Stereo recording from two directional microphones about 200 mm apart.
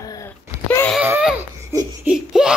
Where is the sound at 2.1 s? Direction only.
5° right (ahead or behind).